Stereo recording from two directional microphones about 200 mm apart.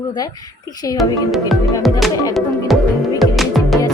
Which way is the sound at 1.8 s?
Centre (ahead or behind).